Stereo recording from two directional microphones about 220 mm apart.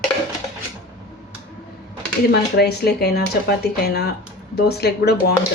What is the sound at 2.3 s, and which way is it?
Speech, 45° left (ahead or behind).